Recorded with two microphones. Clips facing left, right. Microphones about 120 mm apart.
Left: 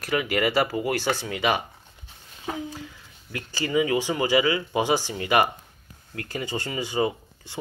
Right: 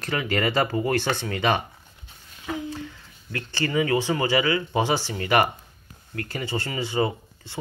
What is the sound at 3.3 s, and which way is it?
Speech, 15° left (ahead or behind).